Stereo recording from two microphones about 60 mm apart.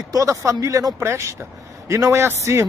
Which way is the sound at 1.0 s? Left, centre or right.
Right.